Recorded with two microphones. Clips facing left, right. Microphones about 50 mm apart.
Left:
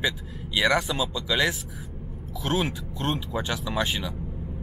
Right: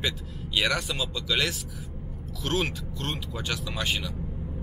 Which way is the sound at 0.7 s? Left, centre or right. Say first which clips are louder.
Left 5 dB; centre.